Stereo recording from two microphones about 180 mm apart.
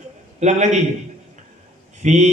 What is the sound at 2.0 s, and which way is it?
Speech, 40° right (ahead or behind).